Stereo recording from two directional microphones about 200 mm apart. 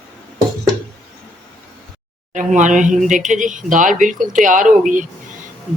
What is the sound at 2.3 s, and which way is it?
Speech, 40° right (ahead or behind).